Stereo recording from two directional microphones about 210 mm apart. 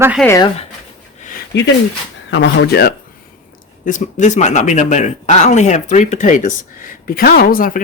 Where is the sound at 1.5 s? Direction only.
55° left (ahead or behind).